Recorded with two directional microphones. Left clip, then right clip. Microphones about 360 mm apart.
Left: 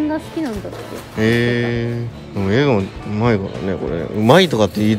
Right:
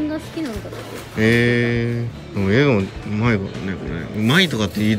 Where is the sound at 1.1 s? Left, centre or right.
Centre.